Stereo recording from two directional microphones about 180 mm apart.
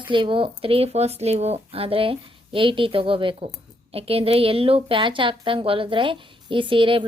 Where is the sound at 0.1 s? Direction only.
30° right (ahead or behind).